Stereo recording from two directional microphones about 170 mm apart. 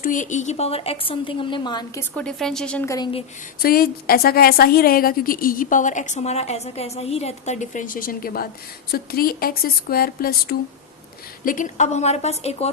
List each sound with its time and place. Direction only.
0.0 s a woman's voice: 50° left (ahead or behind); by 1.8 s 25° left (ahead or behind)
2.0 s speech: 5° left (ahead or behind)
2.8 s a woman's voice: 20° left (ahead or behind)
3.6 s a woman's voice: 60° left (ahead or behind)
11.4 s a woman's voice: 50° left (ahead or behind)